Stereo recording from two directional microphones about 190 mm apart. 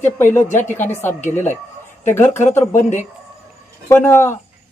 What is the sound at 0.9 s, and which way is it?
Speech, 10° left (ahead or behind).